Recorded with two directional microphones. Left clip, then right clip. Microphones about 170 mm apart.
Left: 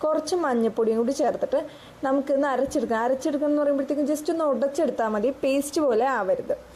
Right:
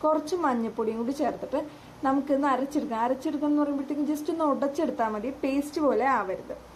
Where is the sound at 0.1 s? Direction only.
35° left (ahead or behind).